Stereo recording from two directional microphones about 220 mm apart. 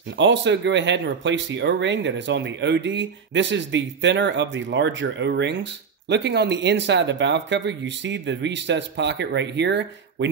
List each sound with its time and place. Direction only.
0.2 s speech: 55° right (ahead or behind)